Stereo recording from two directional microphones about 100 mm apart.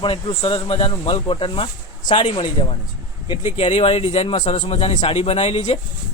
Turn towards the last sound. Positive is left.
turn(degrees=70)  # may be behind; listen again after turning